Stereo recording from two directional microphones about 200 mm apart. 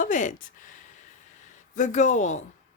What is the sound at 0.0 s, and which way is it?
Speech, 40° left (ahead or behind).